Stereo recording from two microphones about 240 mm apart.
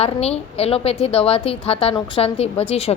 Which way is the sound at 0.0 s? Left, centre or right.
Left.